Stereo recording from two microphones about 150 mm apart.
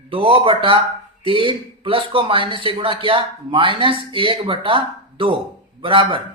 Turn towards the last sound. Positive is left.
turn(degrees=-35)  # may be behind; listen again after turning